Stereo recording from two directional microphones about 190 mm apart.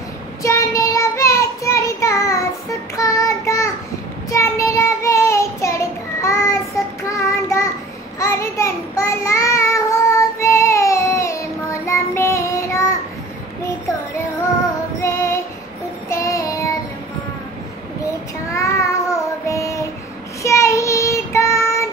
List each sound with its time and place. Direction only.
0.4 s child singing: 15° left (ahead or behind)
15.0 s child singing: 15° left (ahead or behind)
18.5 s child singing: 15° left (ahead or behind)